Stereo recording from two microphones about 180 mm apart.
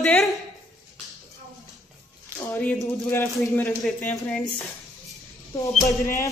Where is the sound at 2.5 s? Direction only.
10° left (ahead or behind).